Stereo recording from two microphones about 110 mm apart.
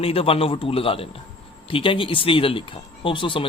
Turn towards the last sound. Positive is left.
turn(degrees=50)  # may be behind; listen again after turning